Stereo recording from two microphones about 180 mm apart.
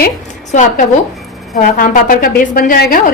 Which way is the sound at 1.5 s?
50° left (ahead or behind).